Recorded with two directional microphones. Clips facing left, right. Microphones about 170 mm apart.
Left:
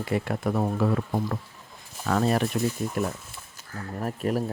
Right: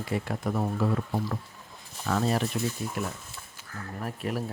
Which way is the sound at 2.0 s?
60° left (ahead or behind).